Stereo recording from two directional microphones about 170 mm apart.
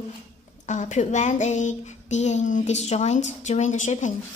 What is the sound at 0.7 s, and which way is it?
Child singing, 45° left (ahead or behind).